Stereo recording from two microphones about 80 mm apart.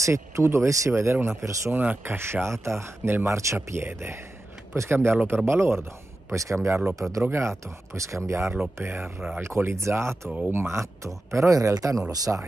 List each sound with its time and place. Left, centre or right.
0.0 s speech: right
1.7 s speech: right
12.3 s speech: right